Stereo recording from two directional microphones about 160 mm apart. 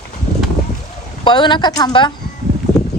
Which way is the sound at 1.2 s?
30° left (ahead or behind).